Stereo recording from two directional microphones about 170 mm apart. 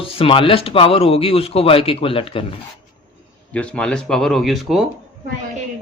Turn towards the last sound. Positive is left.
turn(degrees=0)  # may be behind; listen again after turning